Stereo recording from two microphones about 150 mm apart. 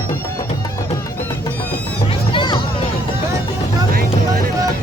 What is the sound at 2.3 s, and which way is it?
Music, 35° left (ahead or behind).